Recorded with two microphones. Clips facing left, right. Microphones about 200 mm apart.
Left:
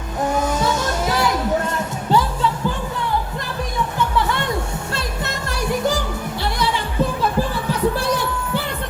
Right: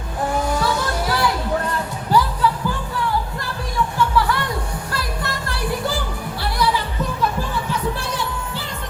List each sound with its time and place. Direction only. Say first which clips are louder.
0.3 s a sound: even; 20° left (ahead or behind)
2.0 s music: even; 25° left (ahead or behind)
3.9 s music: right 1 dB; 20° left (ahead or behind)